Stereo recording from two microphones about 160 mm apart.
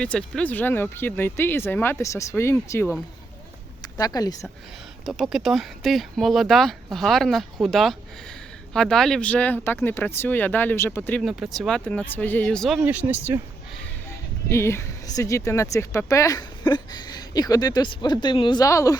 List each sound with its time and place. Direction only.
0.0 s speech: 5° left (ahead or behind)
3.9 s speech: 25° left (ahead or behind)
5.0 s speech: centre (ahead or behind)
11.2 s speech: centre (ahead or behind)
12.8 s speech: 10° right (ahead or behind)
14.1 s speech: 15° left (ahead or behind)